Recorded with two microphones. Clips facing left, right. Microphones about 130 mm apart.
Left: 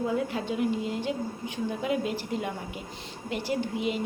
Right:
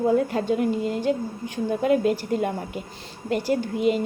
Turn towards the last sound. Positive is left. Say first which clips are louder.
# right 7 dB
turn(degrees=-45)  # may be behind; listen again after turning